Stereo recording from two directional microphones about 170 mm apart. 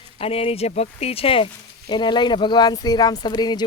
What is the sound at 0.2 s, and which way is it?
Speech, 35° left (ahead or behind).